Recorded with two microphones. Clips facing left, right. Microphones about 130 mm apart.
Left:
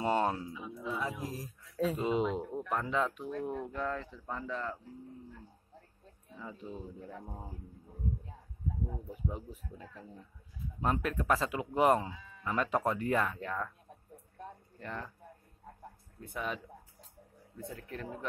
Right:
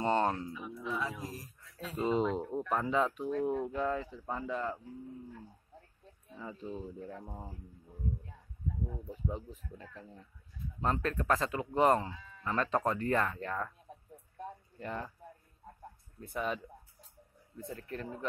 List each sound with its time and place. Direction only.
0.0 s a sound: 10° left (ahead or behind)
1.2 s speech: 5° left (ahead or behind)
2.7 s speech: 5° right (ahead or behind)
6.2 s speech: centre (ahead or behind)
9.1 s speech: 10° left (ahead or behind)
14.8 s speech: 5° right (ahead or behind)
16.2 s speech: centre (ahead or behind)